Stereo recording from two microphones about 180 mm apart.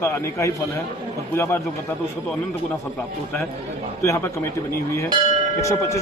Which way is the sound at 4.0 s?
15° left (ahead or behind).